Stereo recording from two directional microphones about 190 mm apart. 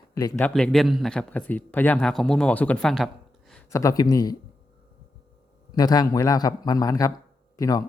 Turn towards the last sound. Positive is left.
turn(degrees=20)  # may be behind; listen again after turning